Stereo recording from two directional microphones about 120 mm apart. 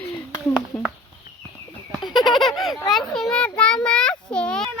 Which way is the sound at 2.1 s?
Centre (ahead or behind).